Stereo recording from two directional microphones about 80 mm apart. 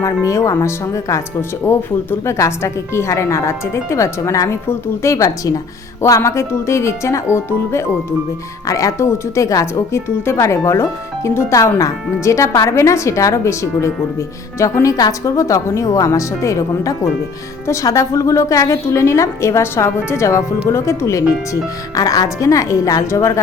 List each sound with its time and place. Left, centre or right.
0.0 s speech: left